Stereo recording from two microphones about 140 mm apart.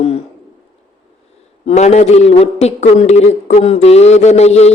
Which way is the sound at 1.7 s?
55° left (ahead or behind).